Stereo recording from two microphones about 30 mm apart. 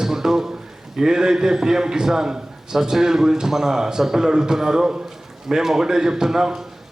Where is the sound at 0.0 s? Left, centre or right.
Centre.